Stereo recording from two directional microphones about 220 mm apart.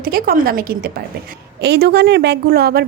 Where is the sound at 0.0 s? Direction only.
40° right (ahead or behind).